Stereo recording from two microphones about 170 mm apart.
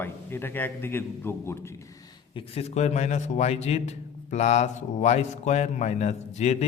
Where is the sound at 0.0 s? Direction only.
15° left (ahead or behind).